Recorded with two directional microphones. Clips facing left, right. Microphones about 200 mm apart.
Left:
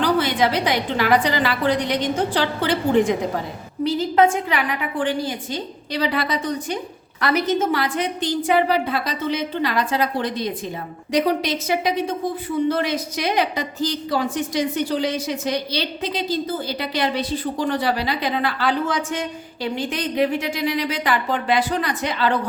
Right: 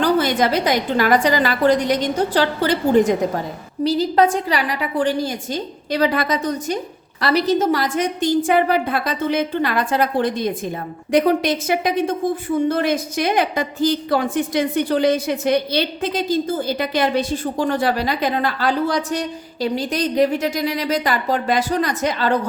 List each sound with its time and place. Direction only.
0.0 s a woman's voice: 45° right (ahead or behind)